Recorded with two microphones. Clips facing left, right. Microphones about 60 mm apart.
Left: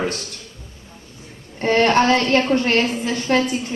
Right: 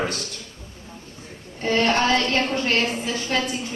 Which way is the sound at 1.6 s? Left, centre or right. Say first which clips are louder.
Left 5 dB; left.